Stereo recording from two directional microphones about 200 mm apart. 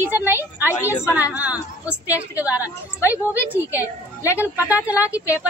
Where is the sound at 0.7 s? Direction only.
15° left (ahead or behind).